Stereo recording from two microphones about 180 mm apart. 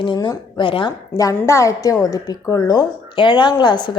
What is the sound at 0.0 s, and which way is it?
Speech, 25° left (ahead or behind).